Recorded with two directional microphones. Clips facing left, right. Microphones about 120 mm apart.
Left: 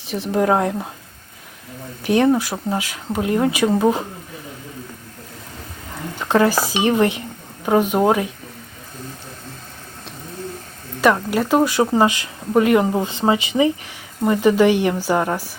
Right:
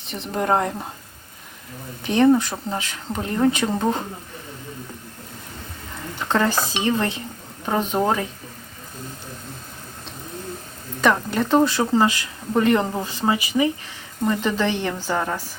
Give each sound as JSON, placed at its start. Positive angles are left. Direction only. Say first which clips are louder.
{"t": 0.0, "sound": "speech", "louder": "left 6 dB", "side_deg": 5}
{"t": 2.0, "sound": "speech", "louder": "even", "side_deg": 10}
{"t": 6.2, "sound": "speech", "louder": "left 4 dB", "side_deg": 15}
{"t": 11.0, "sound": "speech", "louder": "left 3 dB", "side_deg": 5}
{"t": 13.0, "sound": "speech", "louder": "left 4 dB", "side_deg": 20}
{"t": 14.3, "sound": "speech", "louder": "left 7 dB", "side_deg": 15}